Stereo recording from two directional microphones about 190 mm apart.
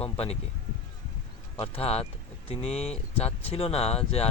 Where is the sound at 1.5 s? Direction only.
30° left (ahead or behind).